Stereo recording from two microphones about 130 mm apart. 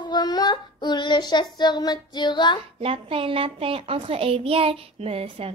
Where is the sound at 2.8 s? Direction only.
45° right (ahead or behind).